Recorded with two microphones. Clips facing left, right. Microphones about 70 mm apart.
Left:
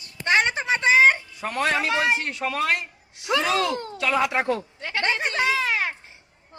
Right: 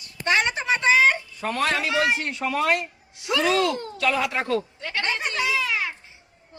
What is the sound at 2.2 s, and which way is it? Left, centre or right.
Speech, centre.